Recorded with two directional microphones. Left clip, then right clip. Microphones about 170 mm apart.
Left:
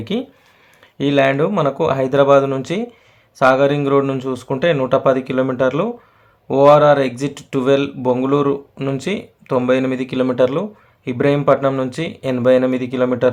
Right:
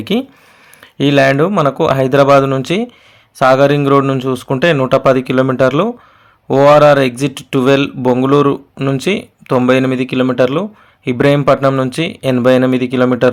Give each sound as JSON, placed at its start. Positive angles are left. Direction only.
{"t": 0.0, "sound": "speech", "side_deg": -35}